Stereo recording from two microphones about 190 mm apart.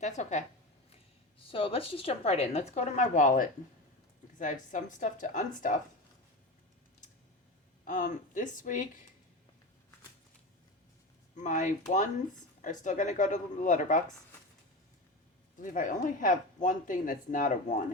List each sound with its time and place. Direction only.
0.0 s speech: 40° left (ahead or behind)
1.4 s speech: 30° left (ahead or behind)
7.9 s speech: 40° left (ahead or behind)
11.3 s speech: 40° left (ahead or behind)
15.6 s speech: 45° left (ahead or behind)